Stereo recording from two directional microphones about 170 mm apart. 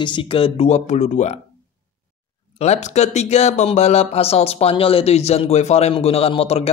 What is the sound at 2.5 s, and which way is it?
Speech, 40° left (ahead or behind).